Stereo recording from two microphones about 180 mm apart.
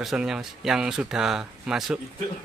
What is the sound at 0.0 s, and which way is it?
A man's voice, 5° right (ahead or behind).